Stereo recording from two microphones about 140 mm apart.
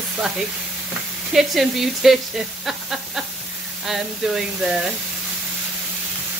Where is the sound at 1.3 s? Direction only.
Centre (ahead or behind).